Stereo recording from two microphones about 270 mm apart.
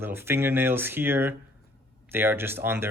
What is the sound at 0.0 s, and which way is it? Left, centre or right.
Speech, centre.